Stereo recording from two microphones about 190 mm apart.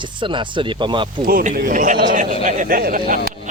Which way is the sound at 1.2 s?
50° right (ahead or behind).